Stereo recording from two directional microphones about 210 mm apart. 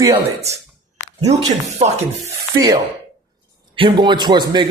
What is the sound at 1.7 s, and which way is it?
Speech, 30° right (ahead or behind).